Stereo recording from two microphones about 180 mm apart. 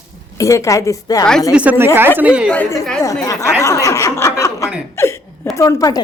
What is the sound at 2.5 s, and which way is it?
Speech, 10° left (ahead or behind).